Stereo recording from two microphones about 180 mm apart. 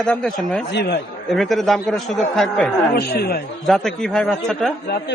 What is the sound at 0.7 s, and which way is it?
Speech, 70° left (ahead or behind).